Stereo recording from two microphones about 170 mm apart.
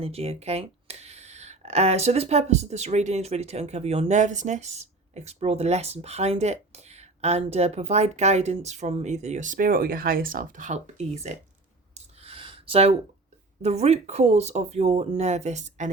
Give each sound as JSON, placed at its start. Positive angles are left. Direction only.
{"t": 0.0, "sound": "speech", "side_deg": -35}
{"t": 11.9, "sound": "a sound", "side_deg": -35}
{"t": 13.6, "sound": "speech", "side_deg": -40}